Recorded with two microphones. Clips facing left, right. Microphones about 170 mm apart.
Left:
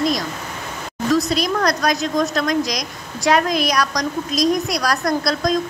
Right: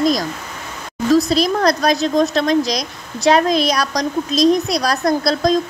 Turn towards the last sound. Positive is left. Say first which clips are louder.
# right 4 dB
turn(degrees=-25)  # may be behind; listen again after turning